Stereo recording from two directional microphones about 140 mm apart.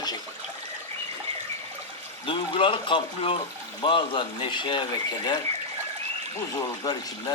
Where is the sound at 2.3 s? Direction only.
40° left (ahead or behind).